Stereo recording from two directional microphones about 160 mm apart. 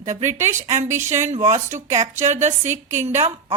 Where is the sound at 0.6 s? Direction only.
45° right (ahead or behind).